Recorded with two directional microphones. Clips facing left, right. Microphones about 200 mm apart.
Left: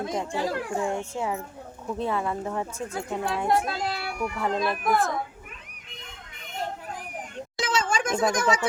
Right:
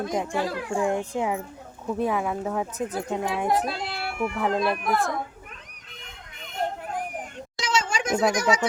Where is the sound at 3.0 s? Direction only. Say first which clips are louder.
Even; 20° right (ahead or behind).